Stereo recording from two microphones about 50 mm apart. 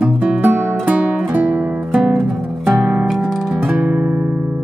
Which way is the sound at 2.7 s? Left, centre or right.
Centre.